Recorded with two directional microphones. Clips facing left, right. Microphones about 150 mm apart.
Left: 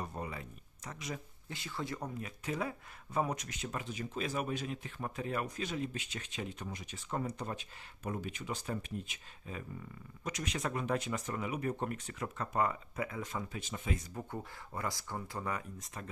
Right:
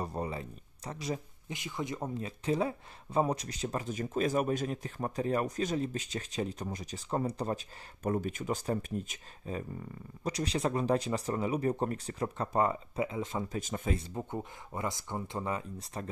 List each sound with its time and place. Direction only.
0.0 s a sound: 35° right (ahead or behind)
1.5 s speech: 15° right (ahead or behind); by 7.6 s 35° right (ahead or behind)
8.0 s speech: 45° right (ahead or behind); by 13.5 s 25° right (ahead or behind)
13.5 s speech: 45° right (ahead or behind)
13.9 s speech: 25° right (ahead or behind)